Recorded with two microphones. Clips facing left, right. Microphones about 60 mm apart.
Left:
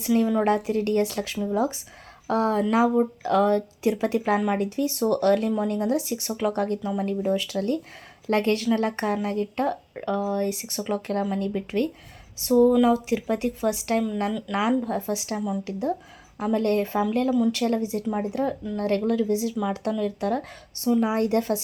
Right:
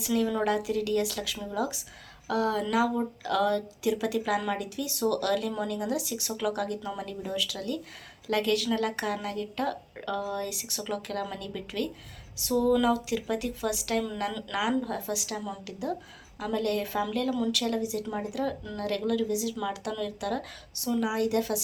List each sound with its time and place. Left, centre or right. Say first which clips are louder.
0.0 s speech: left 5 dB; left
12.5 s speech: left 6 dB; centre; by 21.6 s left